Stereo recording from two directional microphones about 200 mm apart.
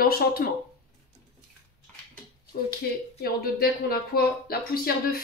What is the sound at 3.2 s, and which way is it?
Speech, 50° left (ahead or behind).